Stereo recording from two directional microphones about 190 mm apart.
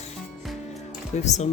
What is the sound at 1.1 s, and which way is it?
Music, 35° left (ahead or behind).